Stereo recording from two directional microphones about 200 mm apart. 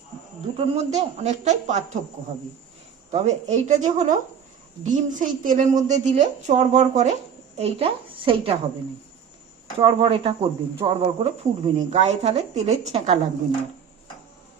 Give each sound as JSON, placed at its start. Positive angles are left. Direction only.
{"t": 0.5, "sound": "speech", "side_deg": -30}
{"t": 3.1, "sound": "speech", "side_deg": -35}
{"t": 9.7, "sound": "speech", "side_deg": -25}